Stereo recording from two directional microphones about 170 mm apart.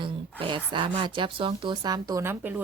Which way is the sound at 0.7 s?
30° right (ahead or behind).